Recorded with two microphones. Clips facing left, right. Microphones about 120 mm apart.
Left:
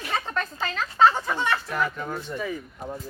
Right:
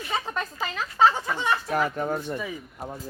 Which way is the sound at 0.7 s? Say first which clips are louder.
Left 1 dB; 15° right (ahead or behind).